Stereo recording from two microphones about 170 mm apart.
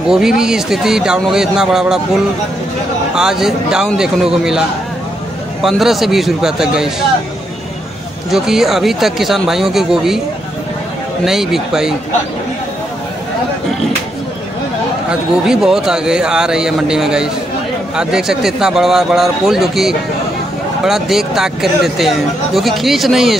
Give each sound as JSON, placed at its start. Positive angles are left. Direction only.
{"t": 0.4, "sound": "speech", "side_deg": -5}
{"t": 3.2, "sound": "speech", "side_deg": -5}
{"t": 8.3, "sound": "speech", "side_deg": -5}
{"t": 11.2, "sound": "speech", "side_deg": 0}
{"t": 15.0, "sound": "speech", "side_deg": -5}